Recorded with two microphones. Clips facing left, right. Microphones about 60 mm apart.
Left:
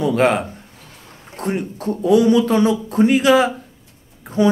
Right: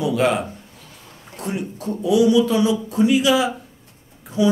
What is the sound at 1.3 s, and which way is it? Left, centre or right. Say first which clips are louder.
A man's voice: left 4 dB; left.